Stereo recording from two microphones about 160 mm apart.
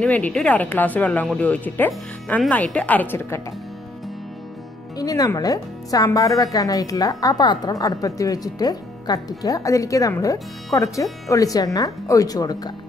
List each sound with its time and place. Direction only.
0.0 s speech: 5° left (ahead or behind)
4.9 s a woman's voice: 20° left (ahead or behind)